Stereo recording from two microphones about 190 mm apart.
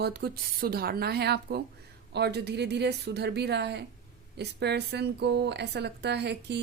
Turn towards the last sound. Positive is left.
turn(degrees=-60)  # may be behind; listen again after turning